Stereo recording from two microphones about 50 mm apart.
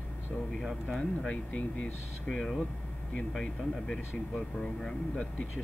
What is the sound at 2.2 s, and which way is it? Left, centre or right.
Speech, centre.